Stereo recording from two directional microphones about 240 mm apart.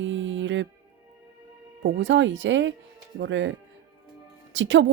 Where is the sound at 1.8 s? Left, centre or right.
Right.